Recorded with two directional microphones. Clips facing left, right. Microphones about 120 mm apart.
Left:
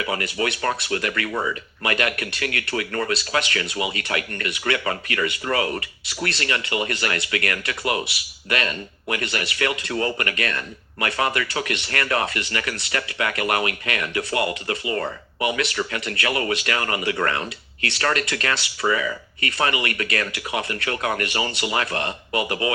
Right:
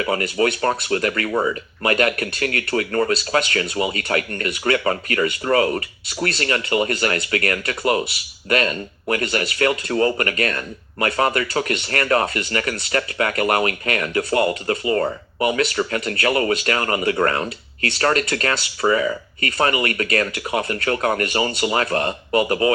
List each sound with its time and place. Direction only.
0.0 s speech: 35° right (ahead or behind)